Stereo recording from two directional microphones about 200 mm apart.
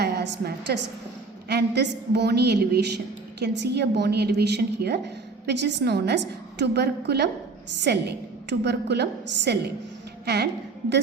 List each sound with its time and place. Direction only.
0.0 s a woman's voice: 55° right (ahead or behind)